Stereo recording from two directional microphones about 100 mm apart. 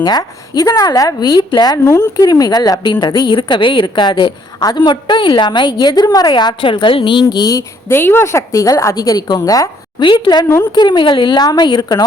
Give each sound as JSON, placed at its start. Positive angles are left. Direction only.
{"t": 0.0, "sound": "a woman's voice", "side_deg": 40}
{"t": 7.9, "sound": "speech", "side_deg": 25}
{"t": 10.0, "sound": "a woman's voice", "side_deg": 50}